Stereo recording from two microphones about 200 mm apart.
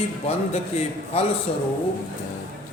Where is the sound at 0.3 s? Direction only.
30° left (ahead or behind).